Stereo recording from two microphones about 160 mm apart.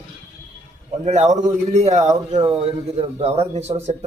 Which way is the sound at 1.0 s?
50° right (ahead or behind).